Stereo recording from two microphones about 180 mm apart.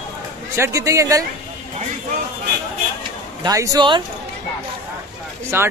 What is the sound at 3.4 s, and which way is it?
Speech, 20° right (ahead or behind).